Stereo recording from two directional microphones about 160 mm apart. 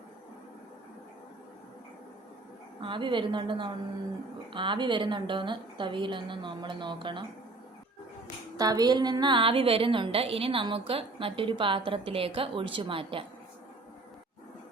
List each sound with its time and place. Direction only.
2.8 s a woman's voice: 30° right (ahead or behind)
8.5 s a woman's voice: 25° right (ahead or behind)